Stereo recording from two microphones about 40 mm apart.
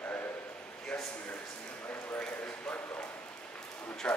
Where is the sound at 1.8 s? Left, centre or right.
Left.